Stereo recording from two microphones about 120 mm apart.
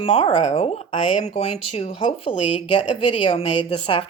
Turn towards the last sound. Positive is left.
turn(degrees=50)  # may be behind; listen again after turning